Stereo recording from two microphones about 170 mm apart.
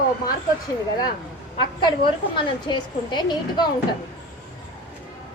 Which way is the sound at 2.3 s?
30° left (ahead or behind).